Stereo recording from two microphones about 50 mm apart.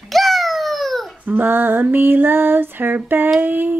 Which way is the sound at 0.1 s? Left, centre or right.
Centre.